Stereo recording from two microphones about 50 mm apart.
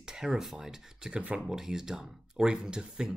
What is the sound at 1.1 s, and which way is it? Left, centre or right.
Speech, right.